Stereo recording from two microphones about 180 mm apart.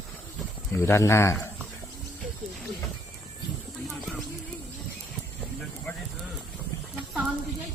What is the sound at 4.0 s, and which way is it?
Clip-clop, centre (ahead or behind).